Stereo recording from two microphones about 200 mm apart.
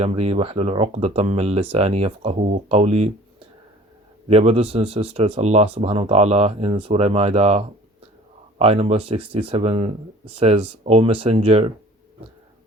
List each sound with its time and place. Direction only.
0.0 s speech: 30° right (ahead or behind)
4.3 s speech: 30° right (ahead or behind)